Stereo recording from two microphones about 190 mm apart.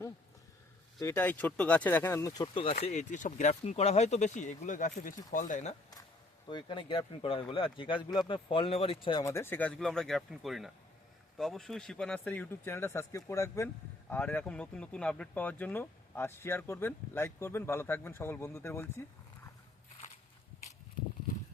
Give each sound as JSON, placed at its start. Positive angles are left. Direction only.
{"t": 0.9, "sound": "speech", "side_deg": 15}
{"t": 2.8, "sound": "speech", "side_deg": 40}
{"t": 6.5, "sound": "speech", "side_deg": 25}